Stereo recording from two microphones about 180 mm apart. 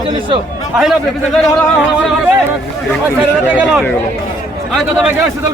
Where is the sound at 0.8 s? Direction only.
Centre (ahead or behind).